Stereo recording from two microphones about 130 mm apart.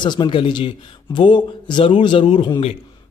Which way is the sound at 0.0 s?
35° left (ahead or behind).